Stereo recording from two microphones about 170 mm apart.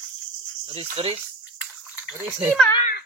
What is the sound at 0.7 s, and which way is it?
Speech, 35° right (ahead or behind).